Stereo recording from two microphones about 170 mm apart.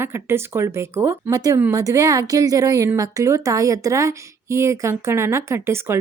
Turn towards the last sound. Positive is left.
turn(degrees=-15)  # may be behind; listen again after turning